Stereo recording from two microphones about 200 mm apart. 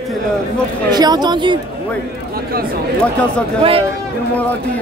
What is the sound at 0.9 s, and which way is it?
Speech, 20° right (ahead or behind).